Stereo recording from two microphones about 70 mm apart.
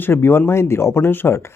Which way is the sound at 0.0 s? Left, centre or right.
Left.